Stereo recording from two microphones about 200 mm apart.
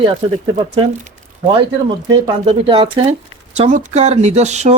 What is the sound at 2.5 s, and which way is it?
Speech, 25° right (ahead or behind).